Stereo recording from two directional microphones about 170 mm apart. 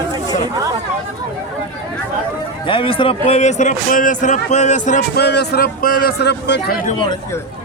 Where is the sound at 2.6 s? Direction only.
30° left (ahead or behind).